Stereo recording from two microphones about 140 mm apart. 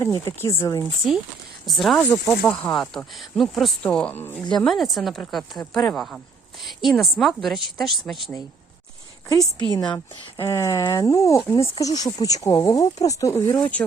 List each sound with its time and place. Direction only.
0.0 s speech: 20° left (ahead or behind)
1.6 s speech: centre (ahead or behind)
2.0 s speech: 10° left (ahead or behind)
4.6 s speech: centre (ahead or behind)
9.3 s speech: 25° left (ahead or behind)
10.4 s speech: 20° left (ahead or behind)